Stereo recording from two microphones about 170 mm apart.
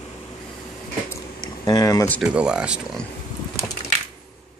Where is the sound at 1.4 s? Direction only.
20° left (ahead or behind).